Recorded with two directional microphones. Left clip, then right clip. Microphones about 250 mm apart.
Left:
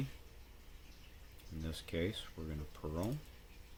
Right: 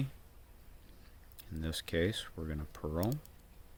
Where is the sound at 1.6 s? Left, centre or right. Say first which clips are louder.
Right 6 dB; right.